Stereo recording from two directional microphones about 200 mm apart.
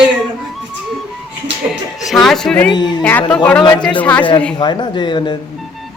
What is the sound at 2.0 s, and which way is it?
A woman's voice, centre (ahead or behind).